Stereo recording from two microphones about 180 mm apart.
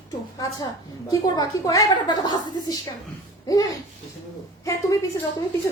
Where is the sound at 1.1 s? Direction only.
20° left (ahead or behind).